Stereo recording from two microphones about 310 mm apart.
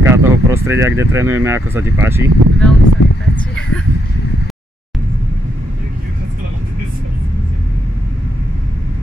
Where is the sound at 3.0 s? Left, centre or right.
Left.